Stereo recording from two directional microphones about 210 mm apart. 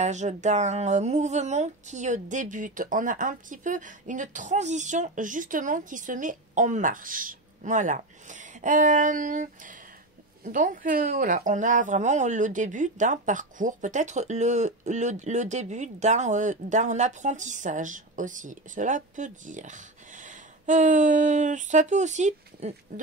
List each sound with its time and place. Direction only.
0.0 s speech: 35° right (ahead or behind)